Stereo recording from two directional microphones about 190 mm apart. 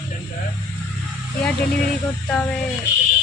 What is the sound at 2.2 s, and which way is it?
Speech, 5° left (ahead or behind).